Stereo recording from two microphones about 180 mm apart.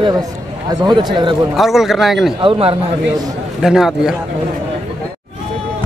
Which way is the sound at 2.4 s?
30° right (ahead or behind).